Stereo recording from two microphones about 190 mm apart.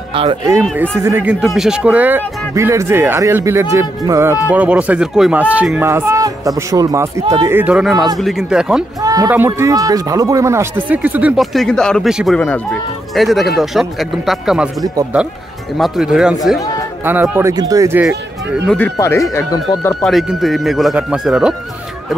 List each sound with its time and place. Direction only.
0.1 s speech: 25° right (ahead or behind)
1.0 s speech: 10° right (ahead or behind)
9.0 s speech: 20° right (ahead or behind); by 14.7 s 5° right (ahead or behind)
15.8 s speech: centre (ahead or behind)
18.0 s speech: centre (ahead or behind)
18.8 s speech: 15° left (ahead or behind)
20.0 s speech: centre (ahead or behind)